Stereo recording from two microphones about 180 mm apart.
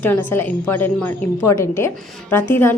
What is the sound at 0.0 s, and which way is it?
A woman's voice, 10° left (ahead or behind).